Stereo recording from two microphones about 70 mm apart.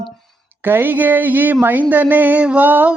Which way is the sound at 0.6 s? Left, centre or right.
Right.